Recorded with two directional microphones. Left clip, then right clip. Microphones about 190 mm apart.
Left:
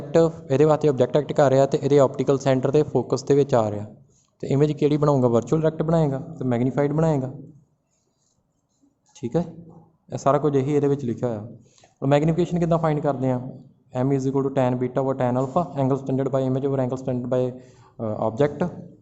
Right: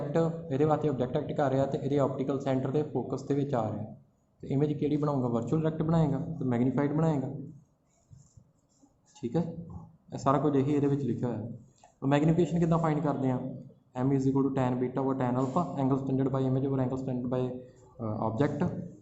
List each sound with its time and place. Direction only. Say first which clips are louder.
0.1 s a man's voice: left 13 dB; 60° left (ahead or behind)
9.1 s speech: left 7 dB; 50° left (ahead or behind)